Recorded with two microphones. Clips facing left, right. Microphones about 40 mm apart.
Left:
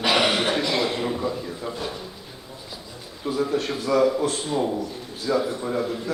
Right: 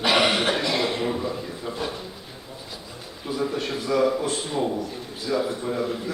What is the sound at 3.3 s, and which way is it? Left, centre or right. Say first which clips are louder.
Speech: left 3 dB; centre.